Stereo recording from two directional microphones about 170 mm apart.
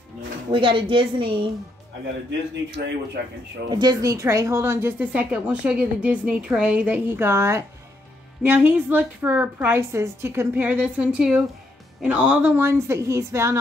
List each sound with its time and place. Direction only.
0.5 s a woman's voice: 30° right (ahead or behind)
3.6 s a woman's voice: 25° right (ahead or behind)